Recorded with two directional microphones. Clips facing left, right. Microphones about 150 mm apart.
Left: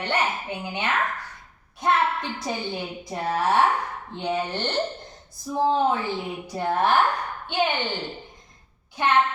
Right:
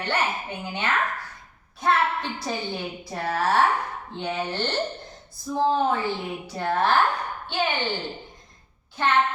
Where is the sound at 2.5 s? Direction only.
15° left (ahead or behind).